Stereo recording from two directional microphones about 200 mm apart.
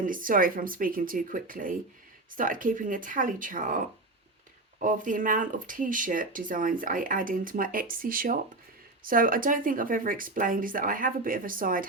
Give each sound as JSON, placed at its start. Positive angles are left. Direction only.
{"t": 0.0, "sound": "speech", "side_deg": -45}